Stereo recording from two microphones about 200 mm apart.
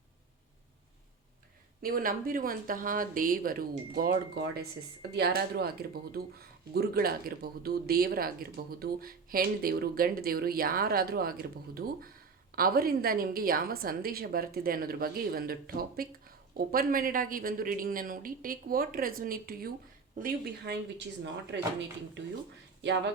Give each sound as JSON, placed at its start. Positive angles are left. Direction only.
{"t": 1.8, "sound": "a woman's voice", "side_deg": -45}